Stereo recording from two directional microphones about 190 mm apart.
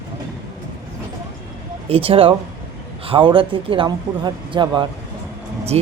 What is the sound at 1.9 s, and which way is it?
Speech, 30° right (ahead or behind).